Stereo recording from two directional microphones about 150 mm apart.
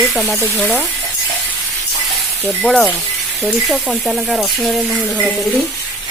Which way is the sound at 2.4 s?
5° left (ahead or behind).